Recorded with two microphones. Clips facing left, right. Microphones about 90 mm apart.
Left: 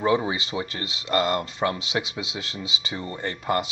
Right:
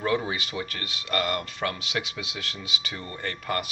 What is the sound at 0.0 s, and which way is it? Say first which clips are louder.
Speech: left 4 dB; 20° left (ahead or behind).